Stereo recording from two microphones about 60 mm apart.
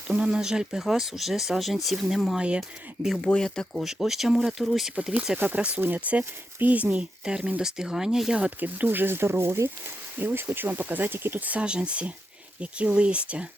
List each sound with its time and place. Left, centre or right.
0.1 s speech: centre
3.3 s speech: centre
3.8 s speech: centre
5.5 s speech: right
8.4 s speech: right